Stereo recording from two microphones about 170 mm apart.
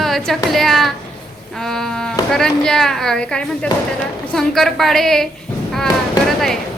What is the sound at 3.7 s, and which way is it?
Speech, 25° left (ahead or behind).